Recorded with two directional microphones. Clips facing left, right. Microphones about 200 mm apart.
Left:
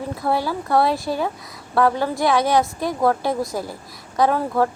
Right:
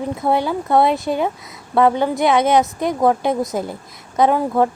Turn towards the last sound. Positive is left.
turn(degrees=-20)  # may be behind; listen again after turning